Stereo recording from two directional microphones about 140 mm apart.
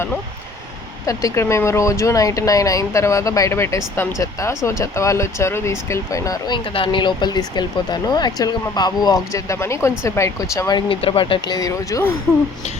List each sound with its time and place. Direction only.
1.0 s speech: 20° left (ahead or behind)
6.7 s speech: 35° left (ahead or behind)